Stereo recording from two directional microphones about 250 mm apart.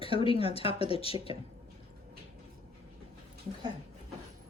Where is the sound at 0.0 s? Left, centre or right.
Left.